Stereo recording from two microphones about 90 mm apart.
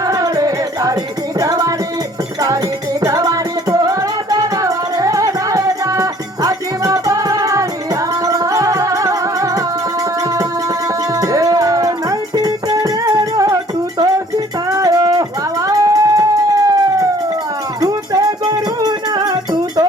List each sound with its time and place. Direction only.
0.0 s music: 40° right (ahead or behind)
3.0 s music: 40° right (ahead or behind)
11.1 s music: 40° right (ahead or behind)